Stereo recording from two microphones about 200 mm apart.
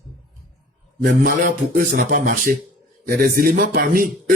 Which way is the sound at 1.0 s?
40° right (ahead or behind).